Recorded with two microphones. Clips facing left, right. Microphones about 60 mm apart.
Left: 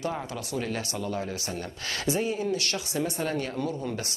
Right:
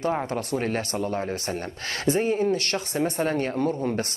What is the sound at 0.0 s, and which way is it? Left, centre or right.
Speech, right.